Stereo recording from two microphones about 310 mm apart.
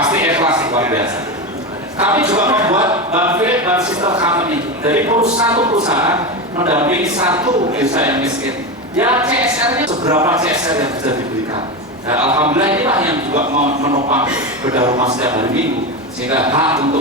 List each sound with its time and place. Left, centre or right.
0.1 s a sound: centre
2.0 s a sound: centre
4.9 s a man's voice: centre
12.2 s speech: centre
13.3 s a man's voice: right
14.1 s a man's voice: centre
14.8 s a man's voice: centre